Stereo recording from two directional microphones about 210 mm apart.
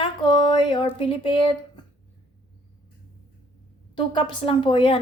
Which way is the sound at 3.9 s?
25° left (ahead or behind).